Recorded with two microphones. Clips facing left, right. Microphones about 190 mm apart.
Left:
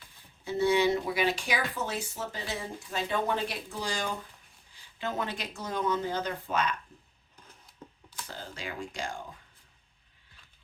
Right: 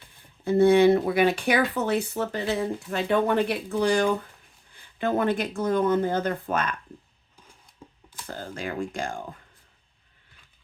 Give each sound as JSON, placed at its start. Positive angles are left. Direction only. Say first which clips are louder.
{"t": 0.4, "sound": "speech", "louder": "right 8 dB", "side_deg": -55}
{"t": 8.3, "sound": "speech", "louder": "right 8 dB", "side_deg": -50}